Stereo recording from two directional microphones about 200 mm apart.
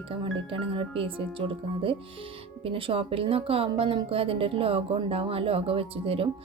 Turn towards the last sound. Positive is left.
turn(degrees=-30)  # may be behind; listen again after turning